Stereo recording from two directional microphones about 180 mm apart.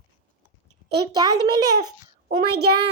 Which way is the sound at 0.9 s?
20° right (ahead or behind).